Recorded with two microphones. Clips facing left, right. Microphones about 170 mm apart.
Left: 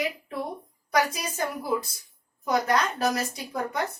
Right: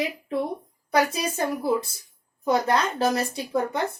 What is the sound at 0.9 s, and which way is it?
A woman's voice, 25° right (ahead or behind).